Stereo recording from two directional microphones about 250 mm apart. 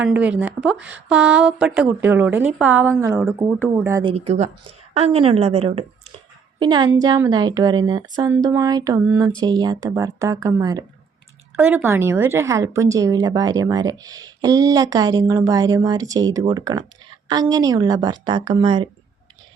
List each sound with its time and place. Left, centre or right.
0.0 s a woman's voice: centre
4.1 s a woman's voice: right